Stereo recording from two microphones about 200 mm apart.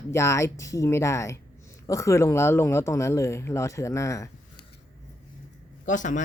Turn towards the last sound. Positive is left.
turn(degrees=40)  # may be behind; listen again after turning